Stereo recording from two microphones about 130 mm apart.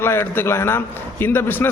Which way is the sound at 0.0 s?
20° left (ahead or behind).